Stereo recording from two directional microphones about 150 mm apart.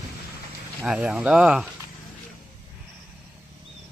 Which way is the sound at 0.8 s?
5° right (ahead or behind).